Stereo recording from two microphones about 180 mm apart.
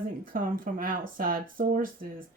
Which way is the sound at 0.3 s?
50° right (ahead or behind).